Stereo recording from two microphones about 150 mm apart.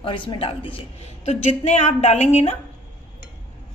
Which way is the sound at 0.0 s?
35° left (ahead or behind).